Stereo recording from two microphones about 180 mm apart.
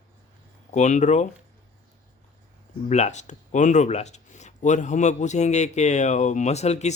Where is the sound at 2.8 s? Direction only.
40° left (ahead or behind).